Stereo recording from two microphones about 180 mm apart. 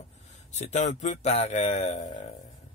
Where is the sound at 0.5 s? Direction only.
40° left (ahead or behind).